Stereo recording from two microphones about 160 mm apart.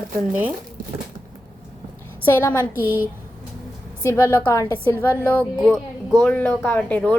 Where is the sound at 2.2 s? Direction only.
15° left (ahead or behind).